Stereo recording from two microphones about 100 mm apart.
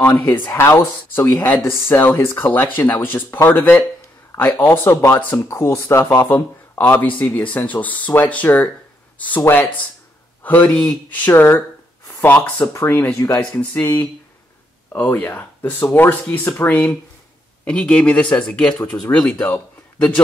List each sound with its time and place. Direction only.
0.0 s speech: 25° left (ahead or behind)
10.4 s speech: 15° left (ahead or behind)
14.9 s speech: 20° left (ahead or behind)